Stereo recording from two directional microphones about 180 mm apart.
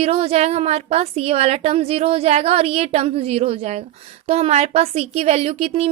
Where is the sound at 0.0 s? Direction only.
35° right (ahead or behind).